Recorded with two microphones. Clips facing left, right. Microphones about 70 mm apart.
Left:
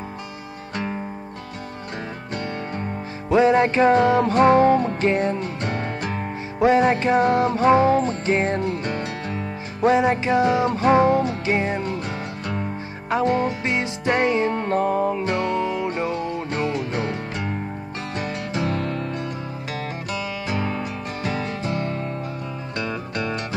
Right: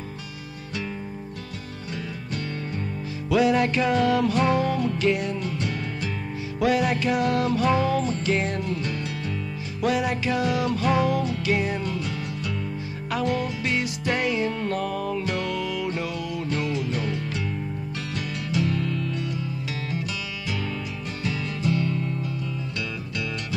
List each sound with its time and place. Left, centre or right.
2.3 s music: left
6.6 s music: left
9.8 s music: left
20.4 s music: left